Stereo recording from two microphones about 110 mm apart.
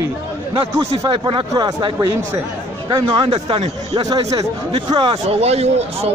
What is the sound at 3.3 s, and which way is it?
Speech, 65° right (ahead or behind).